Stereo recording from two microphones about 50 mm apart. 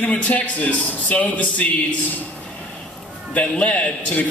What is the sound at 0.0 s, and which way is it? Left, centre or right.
A man's voice, left.